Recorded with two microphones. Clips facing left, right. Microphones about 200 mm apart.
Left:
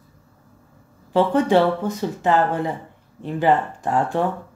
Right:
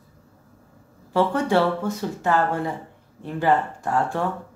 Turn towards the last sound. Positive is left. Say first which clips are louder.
# left 3 dB
turn(degrees=20)  # may be behind; listen again after turning